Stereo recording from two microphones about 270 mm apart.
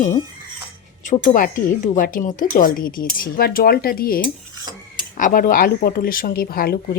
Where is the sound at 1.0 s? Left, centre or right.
Left.